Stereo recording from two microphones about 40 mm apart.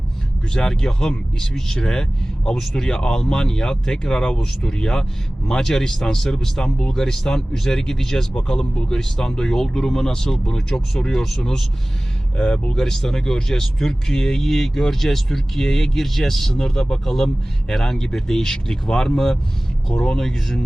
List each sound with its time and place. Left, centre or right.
0.5 s speech: centre
12.7 s speech: centre